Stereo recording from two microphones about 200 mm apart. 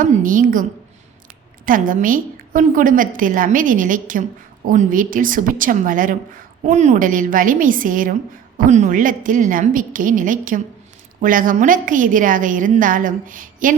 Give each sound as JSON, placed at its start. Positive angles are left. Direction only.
{"t": 0.0, "sound": "a woman's voice", "side_deg": -40}
{"t": 1.6, "sound": "a woman's voice", "side_deg": -45}